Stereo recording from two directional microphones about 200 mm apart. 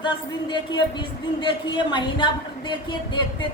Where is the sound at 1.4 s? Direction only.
25° left (ahead or behind).